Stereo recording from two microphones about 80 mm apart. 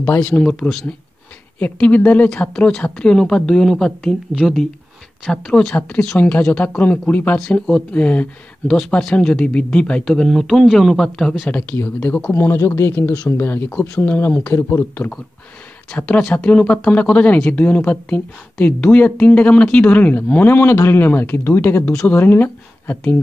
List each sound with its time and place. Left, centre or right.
0.2 s speech: centre
5.7 s speech: centre
7.3 s speech: centre; by 12.9 s left
13.0 s speech: centre
16.1 s speech: centre